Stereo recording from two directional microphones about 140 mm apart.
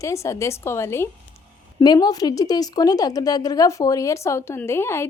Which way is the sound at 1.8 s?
30° left (ahead or behind).